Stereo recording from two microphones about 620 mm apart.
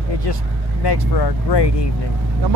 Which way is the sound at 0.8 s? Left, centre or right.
Left.